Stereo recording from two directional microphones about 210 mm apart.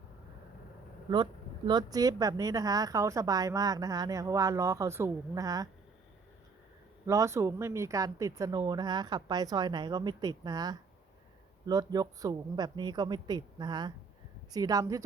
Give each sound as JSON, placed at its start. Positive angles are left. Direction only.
{"t": 1.1, "sound": "speech", "side_deg": -20}
{"t": 7.1, "sound": "a woman's voice", "side_deg": -15}